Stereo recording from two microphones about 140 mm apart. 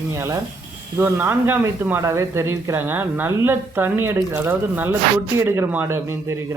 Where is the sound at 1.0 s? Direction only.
15° right (ahead or behind).